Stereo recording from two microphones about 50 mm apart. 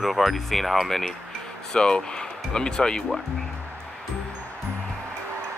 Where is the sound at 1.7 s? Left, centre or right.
Centre.